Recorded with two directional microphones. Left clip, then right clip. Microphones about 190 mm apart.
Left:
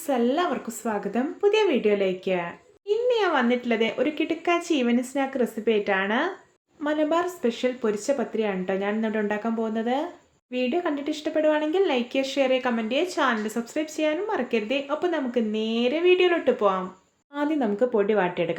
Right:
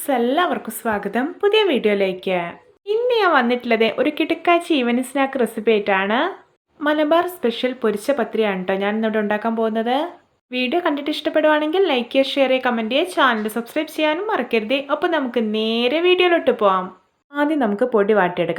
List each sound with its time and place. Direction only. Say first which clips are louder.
0.1 s speech: right 5 dB; 20° right (ahead or behind)